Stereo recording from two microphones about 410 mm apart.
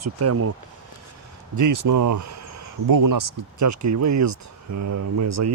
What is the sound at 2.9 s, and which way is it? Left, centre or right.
Speech, right.